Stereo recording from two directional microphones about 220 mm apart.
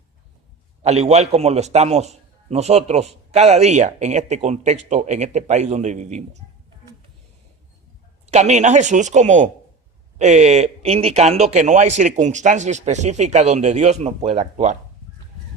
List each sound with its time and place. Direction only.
0.8 s a man's voice: 30° right (ahead or behind)
8.3 s a man's voice: 30° right (ahead or behind)